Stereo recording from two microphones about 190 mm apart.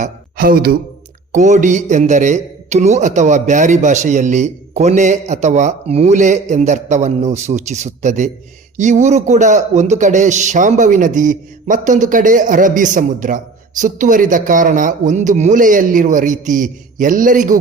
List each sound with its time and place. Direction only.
0.0 s speech: 50° right (ahead or behind)
1.3 s a man's voice: 40° right (ahead or behind)